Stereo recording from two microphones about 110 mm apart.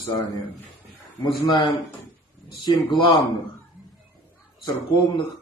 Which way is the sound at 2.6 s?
45° left (ahead or behind).